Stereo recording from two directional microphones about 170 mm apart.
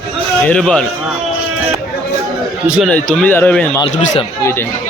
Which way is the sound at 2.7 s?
Centre (ahead or behind).